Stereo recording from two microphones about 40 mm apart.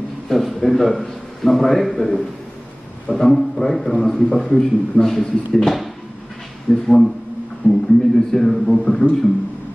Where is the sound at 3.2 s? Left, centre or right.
Centre.